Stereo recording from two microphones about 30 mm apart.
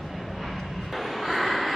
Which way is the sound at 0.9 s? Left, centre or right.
Centre.